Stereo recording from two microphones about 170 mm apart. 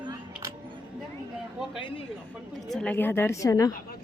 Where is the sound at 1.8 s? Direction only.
30° left (ahead or behind).